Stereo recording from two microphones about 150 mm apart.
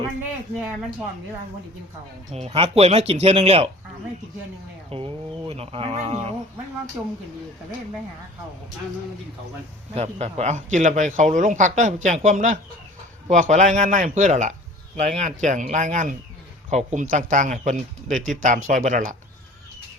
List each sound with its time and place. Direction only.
2.3 s speech: 45° right (ahead or behind)
4.9 s speech: 40° right (ahead or behind)
9.9 s speech: 45° right (ahead or behind); by 19.1 s 60° right (ahead or behind)